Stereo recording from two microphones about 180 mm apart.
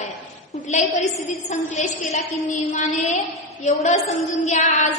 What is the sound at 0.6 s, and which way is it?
Female singing, 40° left (ahead or behind).